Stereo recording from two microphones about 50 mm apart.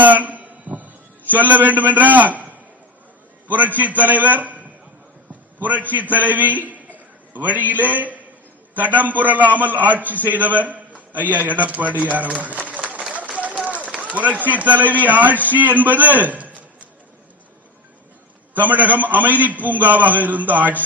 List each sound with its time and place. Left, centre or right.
0.0 s a sound: right
1.3 s a man's voice: right
12.6 s run: right
14.0 s a man's voice: right
18.5 s a man's voice: right